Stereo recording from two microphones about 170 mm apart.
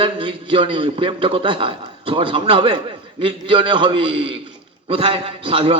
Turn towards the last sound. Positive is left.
turn(degrees=-35)  # may be behind; listen again after turning